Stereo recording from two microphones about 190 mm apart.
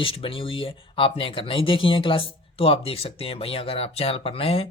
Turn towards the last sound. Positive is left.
turn(degrees=30)  # may be behind; listen again after turning